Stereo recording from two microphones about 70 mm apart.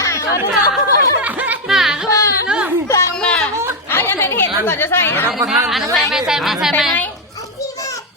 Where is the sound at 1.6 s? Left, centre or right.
Centre.